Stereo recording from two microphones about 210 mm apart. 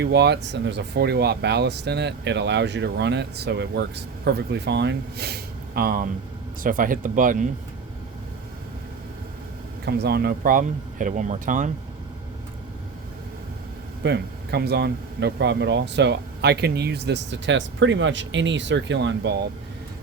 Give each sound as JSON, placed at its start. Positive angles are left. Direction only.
{"t": 0.0, "sound": "speech", "side_deg": -55}
{"t": 9.8, "sound": "speech", "side_deg": -50}
{"t": 14.0, "sound": "speech", "side_deg": -50}